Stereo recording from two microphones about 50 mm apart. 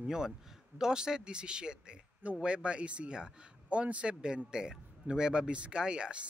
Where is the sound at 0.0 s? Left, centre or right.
Centre.